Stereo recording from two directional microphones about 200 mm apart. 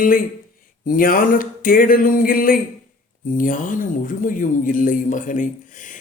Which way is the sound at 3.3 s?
40° left (ahead or behind).